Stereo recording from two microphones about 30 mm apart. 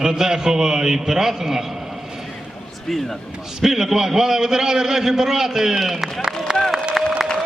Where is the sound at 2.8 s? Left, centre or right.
Centre.